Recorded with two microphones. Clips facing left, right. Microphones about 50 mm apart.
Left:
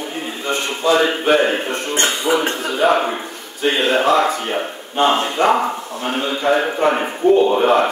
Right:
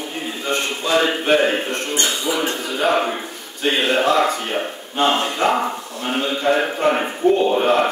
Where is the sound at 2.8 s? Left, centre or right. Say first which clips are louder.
Left 3 dB; centre.